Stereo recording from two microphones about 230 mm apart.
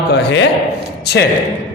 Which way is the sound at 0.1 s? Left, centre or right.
Left.